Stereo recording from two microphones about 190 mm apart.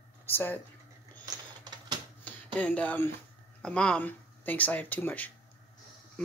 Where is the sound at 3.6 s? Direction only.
5° left (ahead or behind).